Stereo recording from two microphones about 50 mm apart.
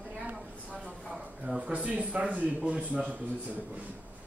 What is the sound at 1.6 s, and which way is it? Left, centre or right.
Speech, right.